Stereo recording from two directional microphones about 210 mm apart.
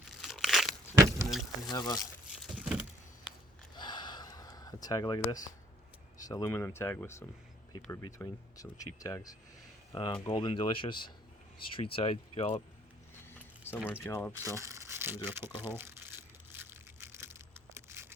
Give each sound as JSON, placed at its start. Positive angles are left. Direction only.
{"t": 0.1, "sound": "crunch", "side_deg": 0}
{"t": 0.9, "sound": "vehicle", "side_deg": -15}
{"t": 1.3, "sound": "a sound", "side_deg": 0}
{"t": 1.7, "sound": "speech", "side_deg": 20}
{"t": 2.5, "sound": "a sound", "side_deg": -5}
{"t": 3.8, "sound": "a sound", "side_deg": 20}
{"t": 6.2, "sound": "speech", "side_deg": 15}
{"t": 13.7, "sound": "speech", "side_deg": -5}
{"t": 14.0, "sound": "speech", "side_deg": 10}
{"t": 14.3, "sound": "speech", "side_deg": -15}
{"t": 16.6, "sound": "crushing", "side_deg": -10}